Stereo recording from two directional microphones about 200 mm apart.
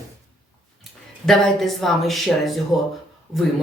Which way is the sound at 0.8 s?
Centre (ahead or behind).